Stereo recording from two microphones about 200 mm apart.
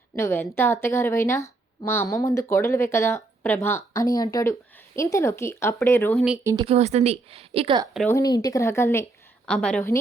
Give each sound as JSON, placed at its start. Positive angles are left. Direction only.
{"t": 0.2, "sound": "speech", "side_deg": 10}
{"t": 6.1, "sound": "a woman's voice", "side_deg": -5}
{"t": 6.4, "sound": "speech", "side_deg": -15}
{"t": 6.7, "sound": "a woman's voice", "side_deg": -35}
{"t": 8.1, "sound": "a woman's voice", "side_deg": 20}